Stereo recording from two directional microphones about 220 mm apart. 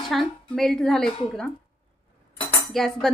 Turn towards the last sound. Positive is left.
turn(degrees=0)  # may be behind; listen again after turning